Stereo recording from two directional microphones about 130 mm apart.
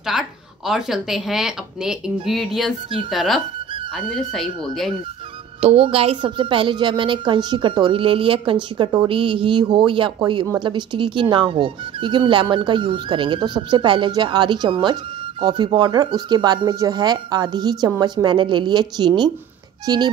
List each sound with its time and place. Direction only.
0.1 s a sound: 5° right (ahead or behind)
0.7 s speech: 5° right (ahead or behind)
5.6 s a woman's voice: 50° right (ahead or behind); by 20.0 s 30° right (ahead or behind)